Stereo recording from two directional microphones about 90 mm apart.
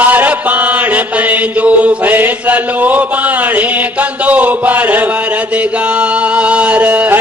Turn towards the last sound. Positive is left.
turn(degrees=-20)  # may be behind; listen again after turning